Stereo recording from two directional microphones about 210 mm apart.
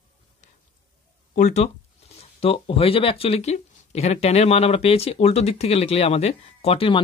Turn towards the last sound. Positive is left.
turn(degrees=25)  # may be behind; listen again after turning